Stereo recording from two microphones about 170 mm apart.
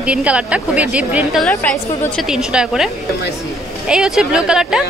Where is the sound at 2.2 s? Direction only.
5° right (ahead or behind).